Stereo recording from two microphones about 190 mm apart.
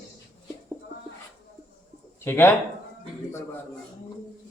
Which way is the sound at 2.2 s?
10° left (ahead or behind).